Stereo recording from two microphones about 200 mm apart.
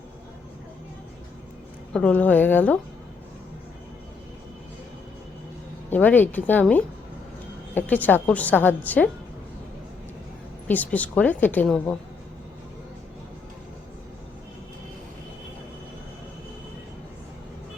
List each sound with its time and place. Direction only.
1.9 s a woman's voice: 5° left (ahead or behind)
5.9 s a woman's voice: 10° left (ahead or behind)
10.7 s a woman's voice: 10° left (ahead or behind)